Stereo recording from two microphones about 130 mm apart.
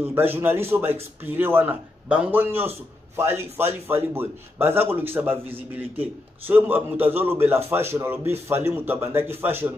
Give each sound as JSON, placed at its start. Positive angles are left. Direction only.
{"t": 0.0, "sound": "a man's voice", "side_deg": -15}